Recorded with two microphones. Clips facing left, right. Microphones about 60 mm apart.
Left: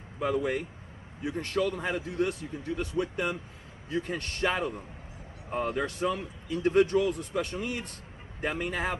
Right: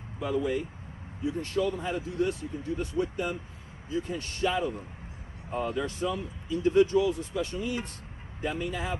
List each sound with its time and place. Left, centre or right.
0.2 s speech: left